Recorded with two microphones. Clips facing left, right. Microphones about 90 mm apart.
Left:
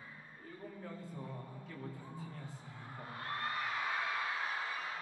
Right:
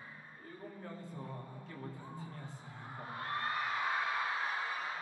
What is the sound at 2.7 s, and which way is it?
Music, 20° right (ahead or behind).